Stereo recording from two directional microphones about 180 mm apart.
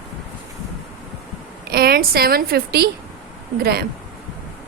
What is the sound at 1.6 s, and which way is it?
A woman's voice, 55° right (ahead or behind).